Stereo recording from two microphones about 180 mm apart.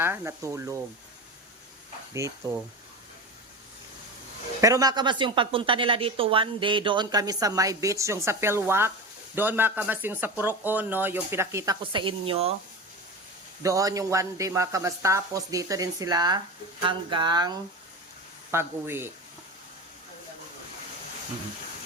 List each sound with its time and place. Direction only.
0.0 s speech: 15° right (ahead or behind)
4.6 s a woman's voice: 20° right (ahead or behind)
13.6 s a woman's voice: 20° right (ahead or behind)